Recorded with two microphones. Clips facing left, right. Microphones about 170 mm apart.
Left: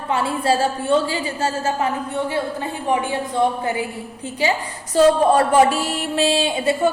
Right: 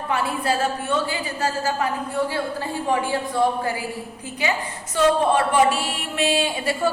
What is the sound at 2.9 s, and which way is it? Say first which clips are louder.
Speech: left 2 dB; 20° left (ahead or behind).